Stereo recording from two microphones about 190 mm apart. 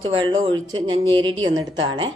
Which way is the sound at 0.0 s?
25° right (ahead or behind).